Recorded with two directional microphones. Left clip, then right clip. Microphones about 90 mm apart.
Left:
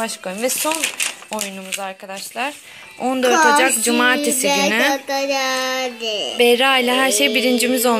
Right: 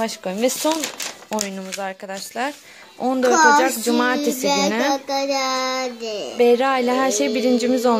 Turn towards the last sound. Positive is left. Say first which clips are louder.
# left 1 dB
turn(degrees=-25)  # may be behind; listen again after turning